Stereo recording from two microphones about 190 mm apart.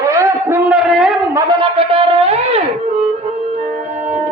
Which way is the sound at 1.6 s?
30° right (ahead or behind).